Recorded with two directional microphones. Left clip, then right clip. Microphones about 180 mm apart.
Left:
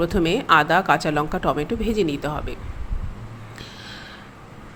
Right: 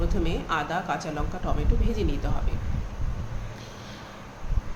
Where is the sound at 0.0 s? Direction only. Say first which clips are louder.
Left 10 dB; 50° left (ahead or behind).